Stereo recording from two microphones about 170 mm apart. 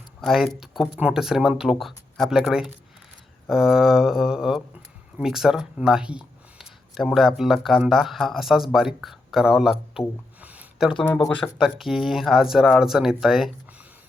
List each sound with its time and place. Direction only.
0.2 s speech: centre (ahead or behind)
10.4 s a sound: 10° right (ahead or behind)
11.0 s speech: 10° left (ahead or behind)